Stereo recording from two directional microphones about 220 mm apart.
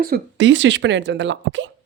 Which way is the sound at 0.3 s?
55° right (ahead or behind).